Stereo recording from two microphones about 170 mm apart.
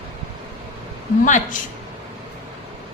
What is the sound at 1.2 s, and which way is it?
Speech, 50° left (ahead or behind).